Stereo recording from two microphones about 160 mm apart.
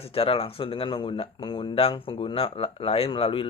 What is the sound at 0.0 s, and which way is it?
Speech, 35° left (ahead or behind).